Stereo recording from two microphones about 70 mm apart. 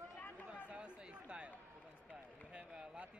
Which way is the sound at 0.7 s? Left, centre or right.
Centre.